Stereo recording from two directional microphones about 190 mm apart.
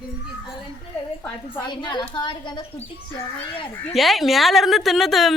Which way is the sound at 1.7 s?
25° left (ahead or behind).